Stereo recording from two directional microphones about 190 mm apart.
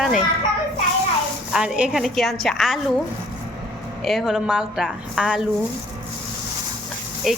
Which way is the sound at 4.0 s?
Centre (ahead or behind).